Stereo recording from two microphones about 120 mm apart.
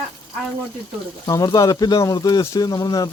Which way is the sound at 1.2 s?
30° left (ahead or behind).